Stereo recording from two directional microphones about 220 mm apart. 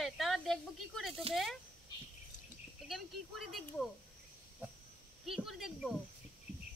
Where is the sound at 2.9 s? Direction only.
Centre (ahead or behind).